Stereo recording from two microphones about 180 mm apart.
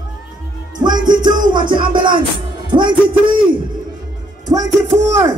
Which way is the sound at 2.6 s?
25° right (ahead or behind).